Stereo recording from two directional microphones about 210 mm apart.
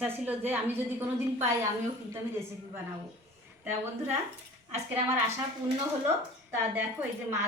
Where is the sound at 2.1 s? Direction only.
10° right (ahead or behind).